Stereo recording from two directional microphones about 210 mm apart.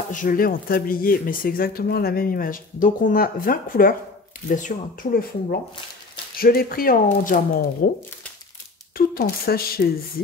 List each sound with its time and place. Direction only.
0.1 s speech: 40° left (ahead or behind)
8.9 s speech: 45° left (ahead or behind)